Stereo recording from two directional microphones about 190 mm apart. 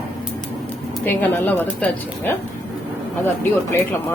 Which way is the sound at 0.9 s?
10° left (ahead or behind).